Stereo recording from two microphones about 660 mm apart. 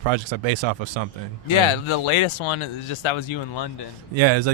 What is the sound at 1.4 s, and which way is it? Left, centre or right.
Speech, left.